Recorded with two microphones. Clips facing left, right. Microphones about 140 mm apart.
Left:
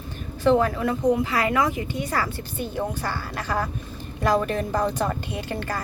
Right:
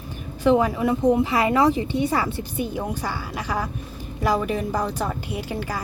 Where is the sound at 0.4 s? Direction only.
15° right (ahead or behind).